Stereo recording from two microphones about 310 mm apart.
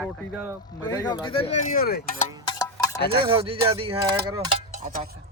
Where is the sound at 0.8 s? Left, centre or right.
Centre; by 2.2 s left.